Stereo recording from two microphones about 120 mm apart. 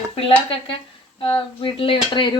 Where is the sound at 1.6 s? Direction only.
45° left (ahead or behind).